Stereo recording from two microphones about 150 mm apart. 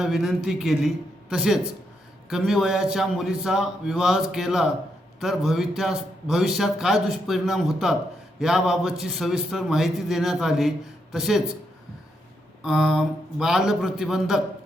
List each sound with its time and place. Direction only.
0.0 s a man's voice: centre (ahead or behind)
12.6 s a man's voice: centre (ahead or behind)